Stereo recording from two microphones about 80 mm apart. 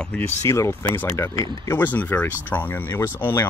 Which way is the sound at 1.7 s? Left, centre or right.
Left.